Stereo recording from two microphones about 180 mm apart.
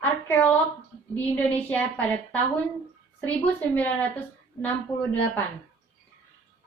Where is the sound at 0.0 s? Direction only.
10° left (ahead or behind).